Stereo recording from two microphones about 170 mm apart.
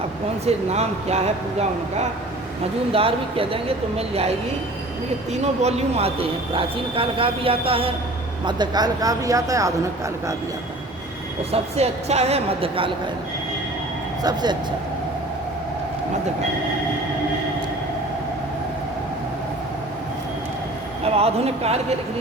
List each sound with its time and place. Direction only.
0.4 s speech: 40° right (ahead or behind); by 9.7 s 20° right (ahead or behind)
11.5 s speech: 40° right (ahead or behind)
14.2 s speech: 25° right (ahead or behind)
21.0 s speech: 35° right (ahead or behind)